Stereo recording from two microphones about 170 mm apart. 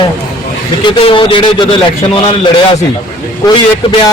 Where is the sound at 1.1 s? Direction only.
30° left (ahead or behind).